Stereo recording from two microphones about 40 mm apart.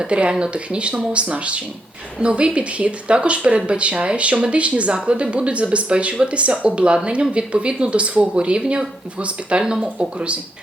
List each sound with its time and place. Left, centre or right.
0.0 s speech: right